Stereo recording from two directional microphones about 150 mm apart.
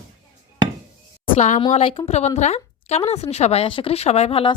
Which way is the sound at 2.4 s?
50° left (ahead or behind).